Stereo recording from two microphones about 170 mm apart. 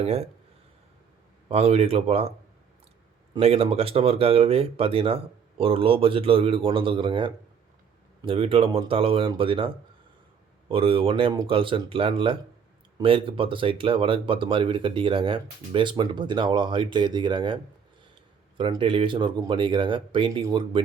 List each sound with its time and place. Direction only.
0.0 s speech: 35° right (ahead or behind)
1.5 s speech: 35° right (ahead or behind)
3.3 s speech: 35° right (ahead or behind)